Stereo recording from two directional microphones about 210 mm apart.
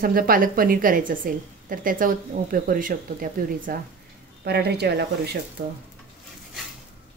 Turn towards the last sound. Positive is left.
turn(degrees=-55)  # may be behind; listen again after turning